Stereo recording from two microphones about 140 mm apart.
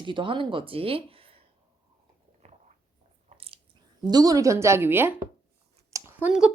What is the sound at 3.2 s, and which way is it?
Biting, 45° right (ahead or behind).